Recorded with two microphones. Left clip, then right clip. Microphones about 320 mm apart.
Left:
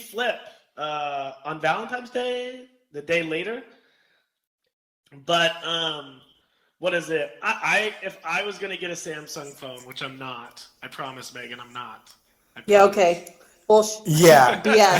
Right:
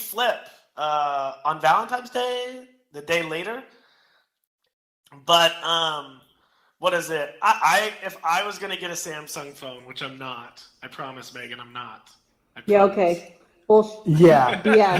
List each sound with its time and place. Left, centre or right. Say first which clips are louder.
0.0 s speech: right 3 dB; centre
2.2 s a sound: right 1 dB; right
2.5 s speech: even; centre
5.0 s a man's voice: right 4 dB; centre
12.6 s speech: left 2 dB; left
14.5 s a man's voice: right 1 dB; centre